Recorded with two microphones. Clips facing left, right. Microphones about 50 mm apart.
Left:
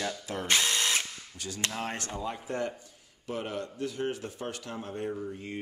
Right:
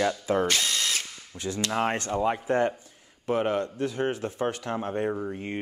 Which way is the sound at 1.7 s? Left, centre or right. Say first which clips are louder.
Right 9 dB; right.